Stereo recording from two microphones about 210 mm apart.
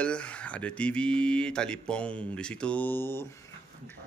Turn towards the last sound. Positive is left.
turn(degrees=10)  # may be behind; listen again after turning